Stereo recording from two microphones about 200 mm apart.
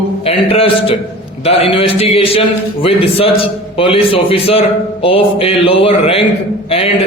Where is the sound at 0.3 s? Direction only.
30° left (ahead or behind).